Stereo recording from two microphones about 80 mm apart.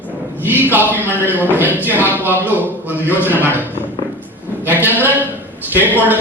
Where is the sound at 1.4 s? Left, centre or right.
Right.